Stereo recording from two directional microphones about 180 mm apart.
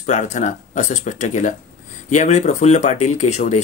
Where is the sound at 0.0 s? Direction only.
40° left (ahead or behind).